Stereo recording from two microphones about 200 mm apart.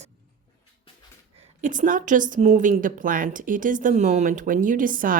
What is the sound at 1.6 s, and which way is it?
A woman's voice, 40° right (ahead or behind).